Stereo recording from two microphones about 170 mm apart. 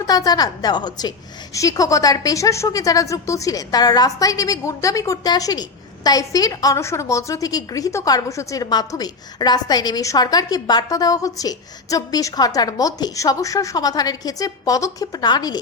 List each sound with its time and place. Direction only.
0.1 s speech: 20° left (ahead or behind)